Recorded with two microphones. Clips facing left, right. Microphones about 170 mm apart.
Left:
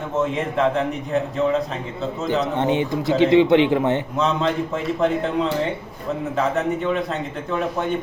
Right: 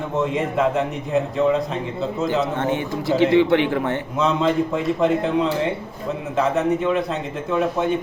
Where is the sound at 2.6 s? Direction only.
20° left (ahead or behind).